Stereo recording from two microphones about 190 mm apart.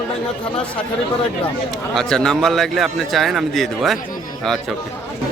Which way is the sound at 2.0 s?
5° left (ahead or behind).